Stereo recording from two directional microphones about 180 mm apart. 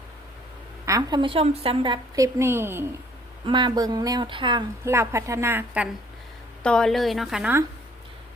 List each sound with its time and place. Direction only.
0.9 s a woman's voice: 20° right (ahead or behind)
3.4 s a woman's voice: 25° right (ahead or behind)
4.9 s a woman's voice: 15° right (ahead or behind)
6.6 s a woman's voice: 5° left (ahead or behind)